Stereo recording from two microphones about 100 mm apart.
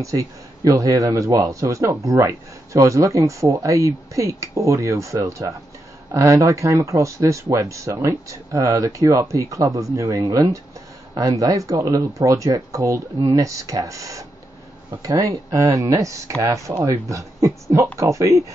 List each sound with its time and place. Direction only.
0.0 s a man's voice: 35° right (ahead or behind)